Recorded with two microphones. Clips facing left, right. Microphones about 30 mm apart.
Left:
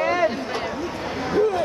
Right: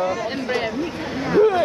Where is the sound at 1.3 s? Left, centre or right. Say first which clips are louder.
Right 5 dB; right.